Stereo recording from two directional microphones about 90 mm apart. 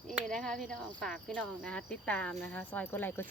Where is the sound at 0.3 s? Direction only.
5° left (ahead or behind).